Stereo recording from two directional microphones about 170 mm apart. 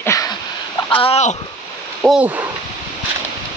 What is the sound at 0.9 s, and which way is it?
Speech, 35° left (ahead or behind).